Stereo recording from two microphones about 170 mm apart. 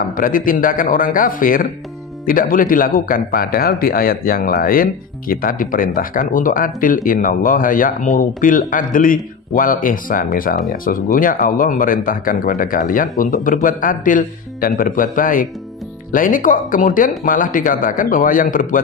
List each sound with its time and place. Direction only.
0.2 s speech: 55° left (ahead or behind)